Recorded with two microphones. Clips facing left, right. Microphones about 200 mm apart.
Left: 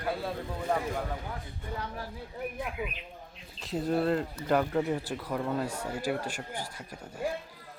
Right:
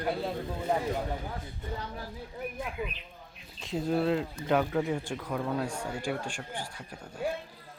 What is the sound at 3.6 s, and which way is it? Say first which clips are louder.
Speech: even; centre (ahead or behind).